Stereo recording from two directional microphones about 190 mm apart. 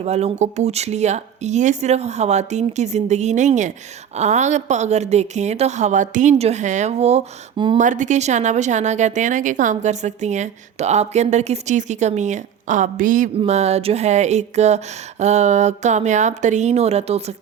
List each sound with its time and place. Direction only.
0.0 s a woman's voice: 35° right (ahead or behind)
7.8 s a woman's voice: 40° right (ahead or behind)